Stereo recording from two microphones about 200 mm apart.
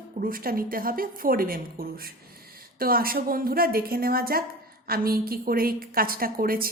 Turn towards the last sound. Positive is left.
turn(degrees=-45)  # may be behind; listen again after turning